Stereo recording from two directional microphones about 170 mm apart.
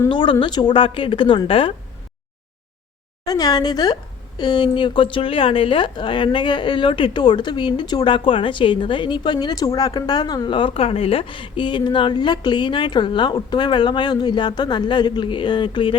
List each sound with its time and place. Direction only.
0.1 s a woman's voice: 30° left (ahead or behind)
3.2 s a woman's voice: 20° left (ahead or behind)